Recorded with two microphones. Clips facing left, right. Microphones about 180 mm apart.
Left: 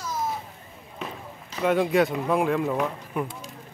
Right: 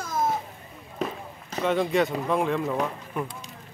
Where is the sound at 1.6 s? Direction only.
5° left (ahead or behind).